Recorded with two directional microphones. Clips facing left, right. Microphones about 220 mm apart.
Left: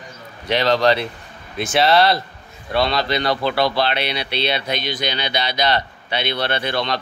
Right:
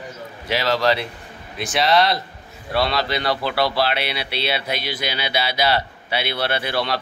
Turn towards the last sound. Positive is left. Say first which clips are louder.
# left 1 dB
turn(degrees=-5)  # may be behind; listen again after turning